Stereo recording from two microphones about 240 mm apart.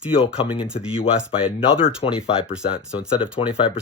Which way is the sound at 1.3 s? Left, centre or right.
Left.